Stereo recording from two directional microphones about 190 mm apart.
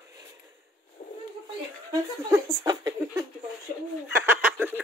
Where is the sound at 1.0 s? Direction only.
40° left (ahead or behind).